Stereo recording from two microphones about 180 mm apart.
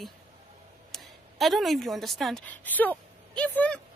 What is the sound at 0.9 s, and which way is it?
A woman's voice, centre (ahead or behind).